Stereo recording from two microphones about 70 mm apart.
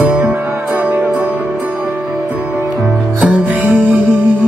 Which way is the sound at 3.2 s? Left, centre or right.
Centre.